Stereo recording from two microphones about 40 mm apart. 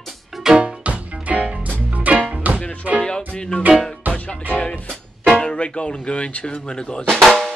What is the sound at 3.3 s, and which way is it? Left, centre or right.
Music, left.